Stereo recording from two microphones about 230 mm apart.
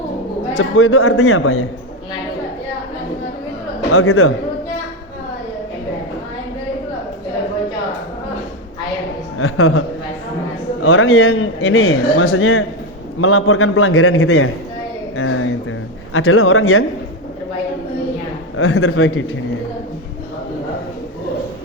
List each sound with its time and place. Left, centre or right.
0.5 s a man's voice: left
3.9 s a man's voice: left
9.4 s a man's voice: left
10.8 s a man's voice: left
15.1 s a sound: left
16.1 s a man's voice: left
18.5 s a man's voice: left